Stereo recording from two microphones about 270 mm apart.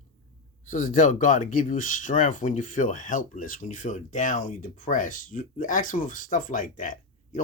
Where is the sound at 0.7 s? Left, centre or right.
Left.